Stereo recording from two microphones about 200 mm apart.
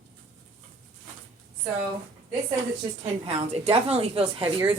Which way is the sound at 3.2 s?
30° right (ahead or behind).